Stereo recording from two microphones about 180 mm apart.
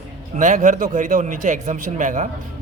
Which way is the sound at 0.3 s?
45° right (ahead or behind).